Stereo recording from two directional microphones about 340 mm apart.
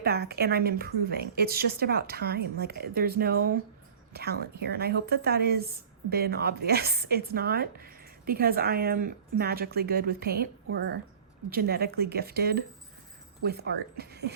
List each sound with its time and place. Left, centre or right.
0.0 s a woman's voice: right